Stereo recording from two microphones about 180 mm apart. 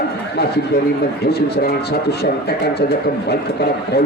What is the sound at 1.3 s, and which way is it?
Speech, 60° left (ahead or behind).